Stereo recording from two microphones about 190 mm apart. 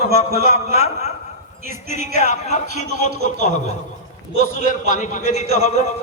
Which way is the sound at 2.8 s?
60° right (ahead or behind).